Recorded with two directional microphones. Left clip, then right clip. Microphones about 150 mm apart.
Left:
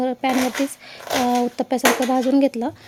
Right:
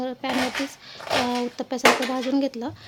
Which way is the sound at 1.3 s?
35° left (ahead or behind).